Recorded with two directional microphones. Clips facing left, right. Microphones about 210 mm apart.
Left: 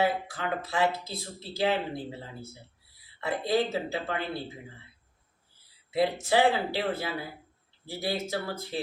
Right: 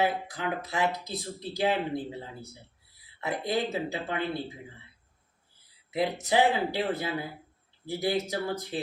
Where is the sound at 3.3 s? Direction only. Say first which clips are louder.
Left 2 dB; 15° right (ahead or behind).